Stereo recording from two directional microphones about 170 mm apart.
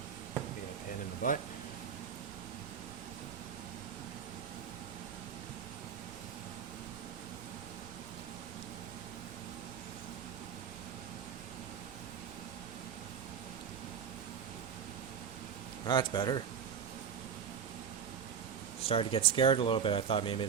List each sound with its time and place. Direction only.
1.2 s speech: 50° left (ahead or behind)
15.9 s speech: 25° left (ahead or behind)
18.9 s speech: 35° left (ahead or behind)